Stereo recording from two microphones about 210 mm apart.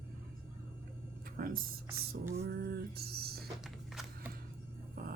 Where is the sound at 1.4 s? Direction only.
45° right (ahead or behind).